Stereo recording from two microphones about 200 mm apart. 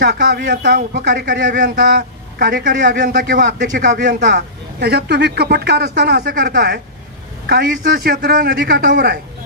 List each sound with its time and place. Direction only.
0.0 s speech: 55° right (ahead or behind); by 4.1 s 40° right (ahead or behind)
4.3 s a man's voice: 55° right (ahead or behind)